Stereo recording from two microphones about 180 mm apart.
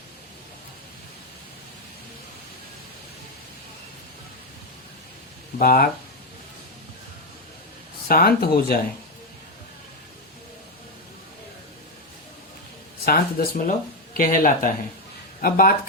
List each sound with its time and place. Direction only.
5.5 s speech: 55° left (ahead or behind)
8.0 s speech: 60° left (ahead or behind)
13.1 s speech: 55° left (ahead or behind)